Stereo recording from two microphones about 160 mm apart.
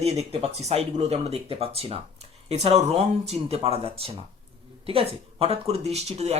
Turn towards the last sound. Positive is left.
turn(degrees=-40)  # may be behind; listen again after turning